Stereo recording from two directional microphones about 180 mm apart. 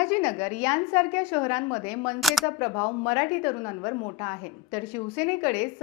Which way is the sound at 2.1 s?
Centre (ahead or behind).